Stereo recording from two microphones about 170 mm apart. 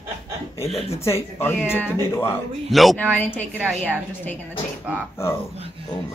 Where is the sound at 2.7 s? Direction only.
Centre (ahead or behind).